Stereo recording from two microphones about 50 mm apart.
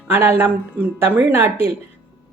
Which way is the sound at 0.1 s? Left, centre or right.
Right.